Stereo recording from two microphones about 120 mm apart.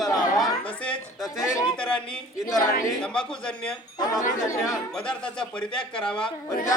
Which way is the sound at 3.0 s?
5° left (ahead or behind).